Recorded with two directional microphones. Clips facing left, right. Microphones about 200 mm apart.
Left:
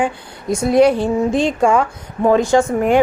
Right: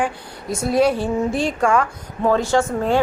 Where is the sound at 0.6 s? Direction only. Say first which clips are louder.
Left 5 dB; 5° right (ahead or behind).